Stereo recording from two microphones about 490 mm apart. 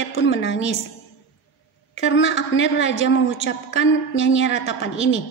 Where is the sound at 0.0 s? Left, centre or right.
Left.